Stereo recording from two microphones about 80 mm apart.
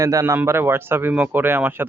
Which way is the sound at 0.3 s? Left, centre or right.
Right.